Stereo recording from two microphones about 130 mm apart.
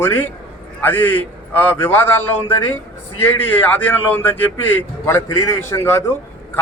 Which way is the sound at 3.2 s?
15° left (ahead or behind).